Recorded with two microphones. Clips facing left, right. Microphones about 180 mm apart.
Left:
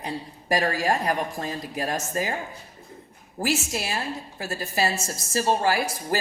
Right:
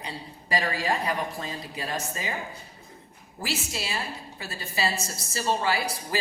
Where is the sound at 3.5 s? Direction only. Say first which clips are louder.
Left 3 dB; 50° left (ahead or behind).